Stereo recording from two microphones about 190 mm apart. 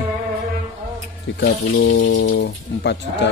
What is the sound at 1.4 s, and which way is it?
Speech, 65° left (ahead or behind).